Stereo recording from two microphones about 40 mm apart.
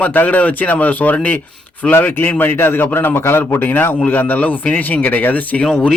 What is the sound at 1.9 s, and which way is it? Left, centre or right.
A man's voice, left.